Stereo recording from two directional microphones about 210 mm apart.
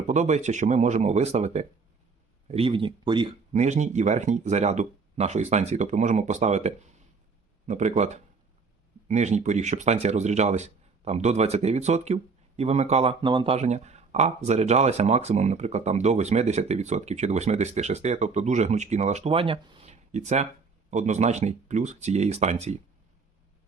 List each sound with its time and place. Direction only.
0.1 s speech: 35° right (ahead or behind)
3.5 s speech: 35° right (ahead or behind)